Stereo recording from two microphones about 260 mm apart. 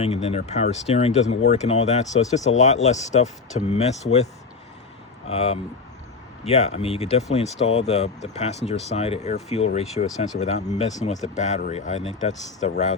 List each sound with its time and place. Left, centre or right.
0.0 s speech: left
5.3 s speech: left